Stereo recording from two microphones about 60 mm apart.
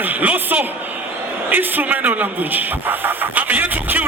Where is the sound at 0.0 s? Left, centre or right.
Right.